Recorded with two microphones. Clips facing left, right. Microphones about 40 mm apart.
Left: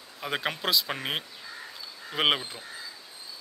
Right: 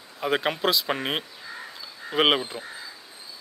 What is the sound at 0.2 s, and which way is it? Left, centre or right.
Speech, centre.